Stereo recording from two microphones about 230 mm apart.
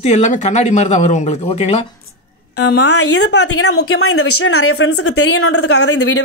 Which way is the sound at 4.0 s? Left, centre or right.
Left.